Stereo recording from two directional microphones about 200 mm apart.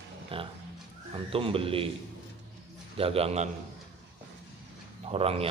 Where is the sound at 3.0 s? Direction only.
30° right (ahead or behind).